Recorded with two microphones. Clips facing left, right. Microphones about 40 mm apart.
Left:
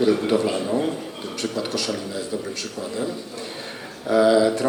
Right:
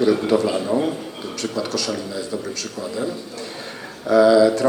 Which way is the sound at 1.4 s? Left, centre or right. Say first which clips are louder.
Right 2 dB; centre.